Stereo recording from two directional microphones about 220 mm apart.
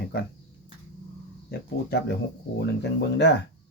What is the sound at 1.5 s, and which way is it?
Speech, 45° left (ahead or behind).